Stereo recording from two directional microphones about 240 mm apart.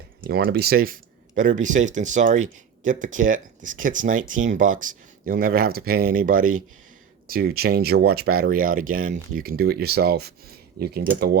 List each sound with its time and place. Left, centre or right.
0.3 s speech: right